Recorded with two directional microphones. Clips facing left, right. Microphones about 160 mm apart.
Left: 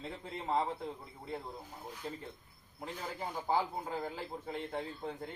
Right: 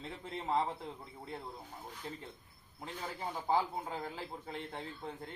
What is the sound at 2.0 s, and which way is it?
A man's voice, centre (ahead or behind).